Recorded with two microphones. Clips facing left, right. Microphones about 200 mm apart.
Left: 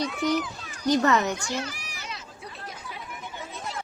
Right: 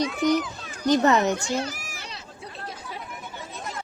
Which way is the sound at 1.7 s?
45° right (ahead or behind).